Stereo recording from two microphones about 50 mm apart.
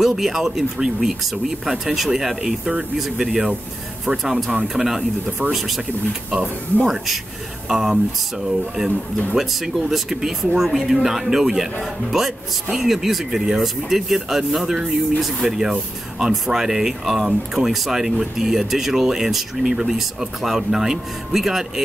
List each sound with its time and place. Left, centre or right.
0.0 s speech: centre
7.6 s speech: centre